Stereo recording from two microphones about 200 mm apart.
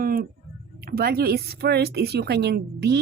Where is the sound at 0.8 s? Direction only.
50° right (ahead or behind).